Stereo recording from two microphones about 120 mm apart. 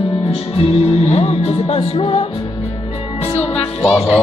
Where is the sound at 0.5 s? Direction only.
60° left (ahead or behind).